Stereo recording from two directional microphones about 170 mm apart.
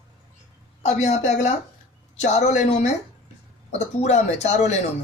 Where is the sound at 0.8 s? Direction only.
45° left (ahead or behind).